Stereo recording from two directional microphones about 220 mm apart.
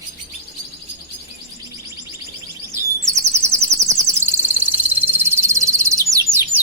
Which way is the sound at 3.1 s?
30° right (ahead or behind).